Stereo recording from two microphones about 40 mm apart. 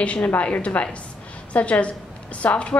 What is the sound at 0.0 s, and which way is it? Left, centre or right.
A woman's voice, left.